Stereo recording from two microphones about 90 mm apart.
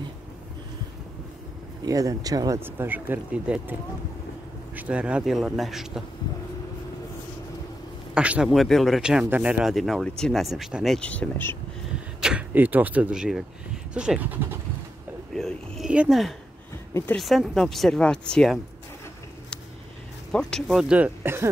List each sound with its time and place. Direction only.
1.9 s speech: 40° right (ahead or behind)
2.6 s speech: 25° right (ahead or behind)
3.5 s speech: 10° right (ahead or behind)
4.7 s speech: 15° right (ahead or behind)
8.1 s speech: 10° right (ahead or behind)
9.7 s speech: centre (ahead or behind)
11.0 s speech: 15° left (ahead or behind)
12.2 s arrow: 10° right (ahead or behind)
12.5 s speech: 20° right (ahead or behind)
15.3 s a sound: 5° left (ahead or behind)
15.9 s speech: 15° right (ahead or behind)
17.2 s speech: centre (ahead or behind)
20.2 s speech: 5° left (ahead or behind)
21.2 s speech: 25° right (ahead or behind)